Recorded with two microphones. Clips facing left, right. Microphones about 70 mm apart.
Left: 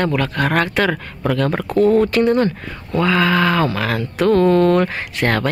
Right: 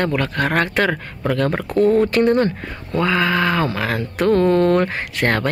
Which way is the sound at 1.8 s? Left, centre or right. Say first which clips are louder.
Left 1 dB; left.